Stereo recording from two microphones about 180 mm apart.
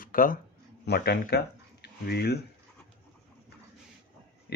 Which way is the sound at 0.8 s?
65° left (ahead or behind).